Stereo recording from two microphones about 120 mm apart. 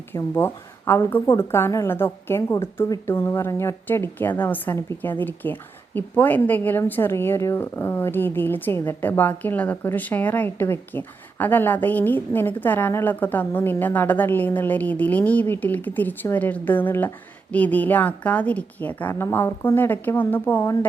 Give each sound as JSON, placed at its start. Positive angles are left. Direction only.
{"t": 0.1, "sound": "a woman's voice", "side_deg": 20}